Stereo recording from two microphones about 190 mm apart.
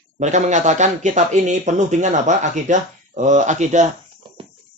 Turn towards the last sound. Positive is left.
turn(degrees=-40)  # may be behind; listen again after turning